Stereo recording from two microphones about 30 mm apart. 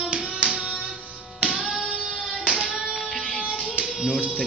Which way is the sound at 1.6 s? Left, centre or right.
Centre.